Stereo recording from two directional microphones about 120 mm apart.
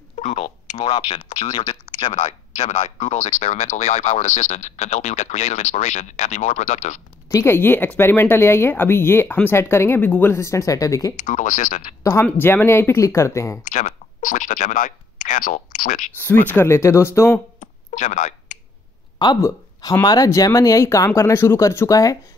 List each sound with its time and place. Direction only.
0.7 s speech: 35° left (ahead or behind)
1.9 s speech: 75° left (ahead or behind)
7.2 s speech: 25° left (ahead or behind)
11.1 s speech: 90° left
12.0 s speech: 25° left (ahead or behind)
13.7 s speech: 90° left
16.3 s speech: 20° left (ahead or behind)
17.6 s a sound: 90° left
19.4 s speech: 30° left (ahead or behind)